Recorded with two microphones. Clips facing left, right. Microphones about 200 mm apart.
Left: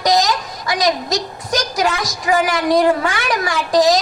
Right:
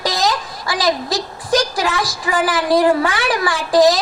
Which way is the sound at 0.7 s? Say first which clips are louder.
Left 1 dB; 30° right (ahead or behind).